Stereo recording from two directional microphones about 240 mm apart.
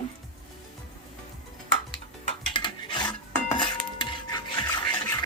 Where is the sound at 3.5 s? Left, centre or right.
Centre.